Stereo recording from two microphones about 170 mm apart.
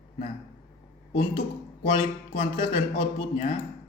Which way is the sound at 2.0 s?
35° left (ahead or behind).